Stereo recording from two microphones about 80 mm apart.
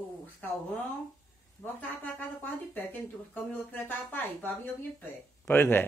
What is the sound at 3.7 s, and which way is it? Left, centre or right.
Speech, left.